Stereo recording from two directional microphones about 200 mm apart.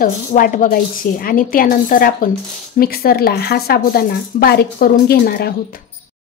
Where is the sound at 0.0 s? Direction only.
40° left (ahead or behind).